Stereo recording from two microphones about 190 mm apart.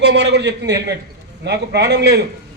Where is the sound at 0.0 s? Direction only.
65° right (ahead or behind).